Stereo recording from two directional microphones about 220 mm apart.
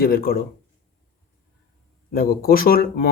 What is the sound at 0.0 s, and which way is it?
Speech, 45° left (ahead or behind).